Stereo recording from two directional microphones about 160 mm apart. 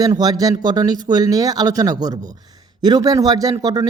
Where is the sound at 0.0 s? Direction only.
25° right (ahead or behind).